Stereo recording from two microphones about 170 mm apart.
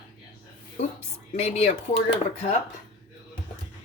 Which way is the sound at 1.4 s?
40° left (ahead or behind).